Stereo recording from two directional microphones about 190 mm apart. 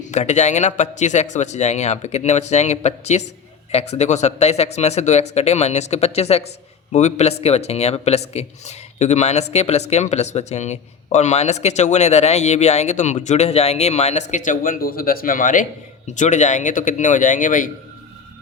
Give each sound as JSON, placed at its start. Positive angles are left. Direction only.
{"t": 0.1, "sound": "speech", "side_deg": 35}